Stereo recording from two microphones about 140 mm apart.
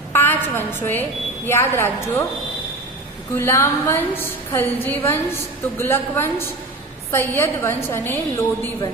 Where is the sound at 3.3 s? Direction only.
15° left (ahead or behind).